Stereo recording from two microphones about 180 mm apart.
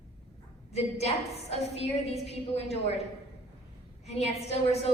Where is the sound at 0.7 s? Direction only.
35° left (ahead or behind).